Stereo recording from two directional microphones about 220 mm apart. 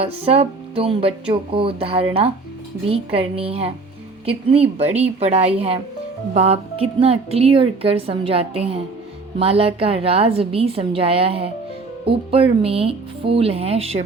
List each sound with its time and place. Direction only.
0.0 s speech: 25° right (ahead or behind)
5.0 s speech: 30° right (ahead or behind)